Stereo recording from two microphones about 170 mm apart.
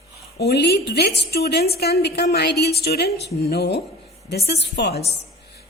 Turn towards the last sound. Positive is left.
turn(degrees=75)  # may be behind; listen again after turning